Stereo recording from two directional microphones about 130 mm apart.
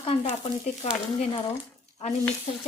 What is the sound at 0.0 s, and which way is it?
Speech, 45° left (ahead or behind).